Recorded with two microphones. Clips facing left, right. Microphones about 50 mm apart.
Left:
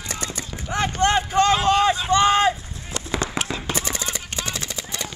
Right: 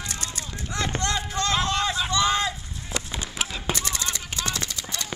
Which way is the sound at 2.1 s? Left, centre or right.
Left.